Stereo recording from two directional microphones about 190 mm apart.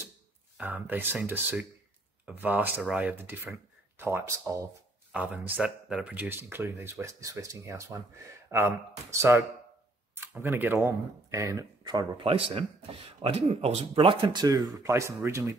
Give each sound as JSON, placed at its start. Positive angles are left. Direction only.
{"t": 0.6, "sound": "speech", "side_deg": -5}